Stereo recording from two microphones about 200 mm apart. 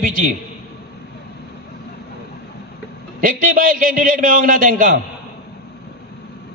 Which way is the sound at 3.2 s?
45° right (ahead or behind).